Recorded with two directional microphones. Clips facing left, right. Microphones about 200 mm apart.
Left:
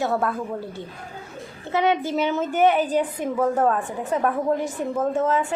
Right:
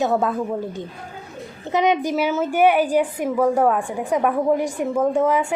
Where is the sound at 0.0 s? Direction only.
20° right (ahead or behind).